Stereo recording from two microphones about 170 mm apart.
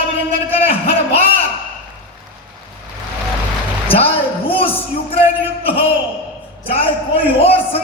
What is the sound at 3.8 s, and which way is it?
Speech, 35° left (ahead or behind).